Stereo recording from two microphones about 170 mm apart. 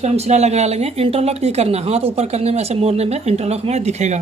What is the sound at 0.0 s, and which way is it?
Speech, 40° right (ahead or behind).